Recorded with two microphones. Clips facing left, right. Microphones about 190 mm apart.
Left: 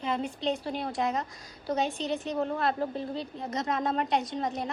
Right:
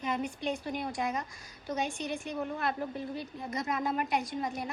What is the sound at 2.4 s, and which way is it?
Speech, 60° left (ahead or behind).